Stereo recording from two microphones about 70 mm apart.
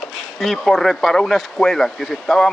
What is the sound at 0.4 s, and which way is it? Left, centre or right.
Speech, centre.